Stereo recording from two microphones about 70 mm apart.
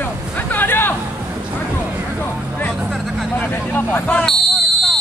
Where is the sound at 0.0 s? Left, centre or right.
Left.